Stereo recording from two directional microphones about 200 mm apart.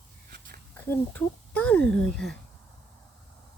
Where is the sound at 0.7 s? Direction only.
10° left (ahead or behind).